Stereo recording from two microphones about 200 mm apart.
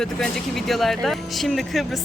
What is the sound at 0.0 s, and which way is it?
Speech, centre (ahead or behind).